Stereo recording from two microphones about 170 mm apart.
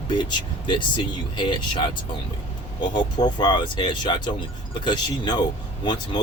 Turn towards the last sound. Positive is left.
turn(degrees=25)  # may be behind; listen again after turning